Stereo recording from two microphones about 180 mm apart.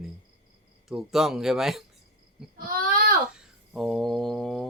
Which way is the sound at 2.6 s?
50° right (ahead or behind).